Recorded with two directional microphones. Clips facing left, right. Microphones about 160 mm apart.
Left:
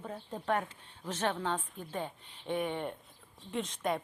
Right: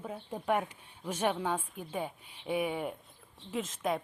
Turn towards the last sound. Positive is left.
turn(degrees=0)  # may be behind; listen again after turning